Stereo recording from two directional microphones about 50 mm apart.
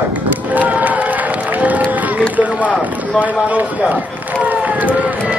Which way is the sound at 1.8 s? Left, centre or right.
Right.